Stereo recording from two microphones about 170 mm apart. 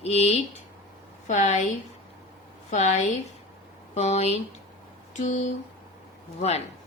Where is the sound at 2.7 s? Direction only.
45° left (ahead or behind).